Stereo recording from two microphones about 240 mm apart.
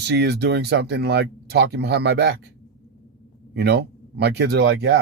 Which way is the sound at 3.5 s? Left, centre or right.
Right.